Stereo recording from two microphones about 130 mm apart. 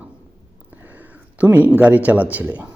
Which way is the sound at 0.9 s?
15° right (ahead or behind).